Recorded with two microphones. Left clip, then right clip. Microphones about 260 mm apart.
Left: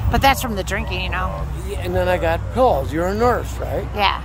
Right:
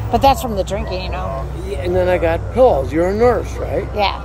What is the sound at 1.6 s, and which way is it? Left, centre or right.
Speech, left.